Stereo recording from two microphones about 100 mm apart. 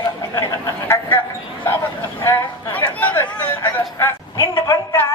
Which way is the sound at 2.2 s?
20° left (ahead or behind).